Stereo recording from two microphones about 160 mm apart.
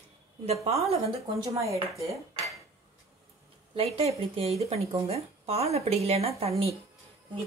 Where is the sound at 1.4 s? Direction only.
20° right (ahead or behind).